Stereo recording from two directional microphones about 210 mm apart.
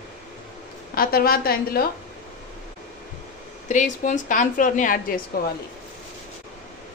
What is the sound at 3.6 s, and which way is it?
A woman's voice, 35° left (ahead or behind).